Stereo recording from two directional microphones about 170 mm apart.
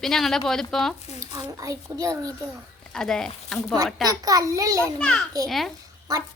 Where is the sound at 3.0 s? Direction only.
5° left (ahead or behind).